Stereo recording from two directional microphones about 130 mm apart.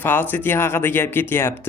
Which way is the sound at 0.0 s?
15° left (ahead or behind).